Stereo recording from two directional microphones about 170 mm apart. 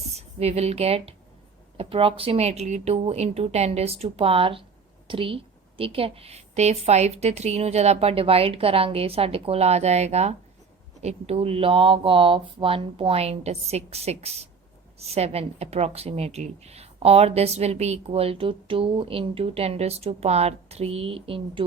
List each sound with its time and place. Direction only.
0.1 s speech: 40° right (ahead or behind)